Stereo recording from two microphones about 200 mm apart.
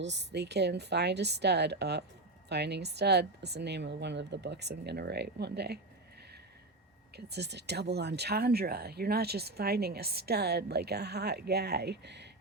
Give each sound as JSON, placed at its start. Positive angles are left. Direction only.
{"t": 0.0, "sound": "speech", "side_deg": -60}
{"t": 7.3, "sound": "speech", "side_deg": -55}